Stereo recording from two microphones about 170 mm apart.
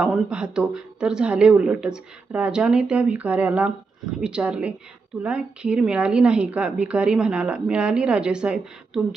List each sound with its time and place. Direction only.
0.0 s a woman's voice: centre (ahead or behind)